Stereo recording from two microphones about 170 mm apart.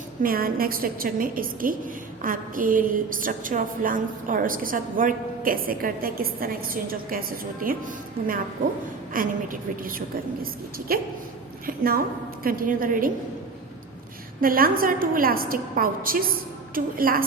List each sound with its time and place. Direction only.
0.2 s a woman's voice: 60° right (ahead or behind)
9.1 s a woman's voice: 55° right (ahead or behind)
14.4 s a woman's voice: 60° right (ahead or behind)